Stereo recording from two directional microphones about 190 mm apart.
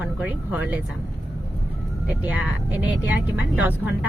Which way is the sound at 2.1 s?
5° right (ahead or behind).